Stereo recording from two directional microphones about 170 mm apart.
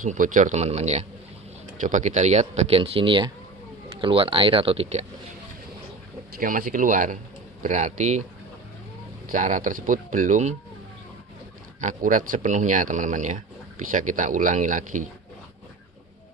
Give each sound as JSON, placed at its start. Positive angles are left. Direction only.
{"t": 0.0, "sound": "speech", "side_deg": -50}
{"t": 6.4, "sound": "speech", "side_deg": -55}
{"t": 9.3, "sound": "speech", "side_deg": -50}
{"t": 11.8, "sound": "speech", "side_deg": -50}